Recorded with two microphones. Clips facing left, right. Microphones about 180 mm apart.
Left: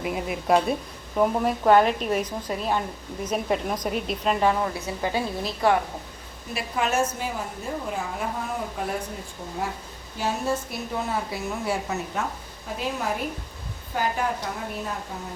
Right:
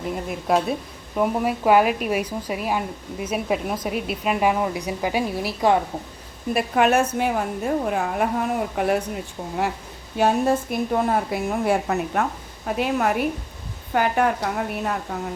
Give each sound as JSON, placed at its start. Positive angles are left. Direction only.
{"t": 0.0, "sound": "speech", "side_deg": 5}
{"t": 6.5, "sound": "a woman's voice", "side_deg": -60}
{"t": 8.8, "sound": "speech", "side_deg": -75}
{"t": 10.2, "sound": "a woman's voice", "side_deg": -60}